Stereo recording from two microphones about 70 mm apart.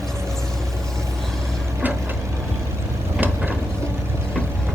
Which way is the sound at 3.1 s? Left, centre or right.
Right.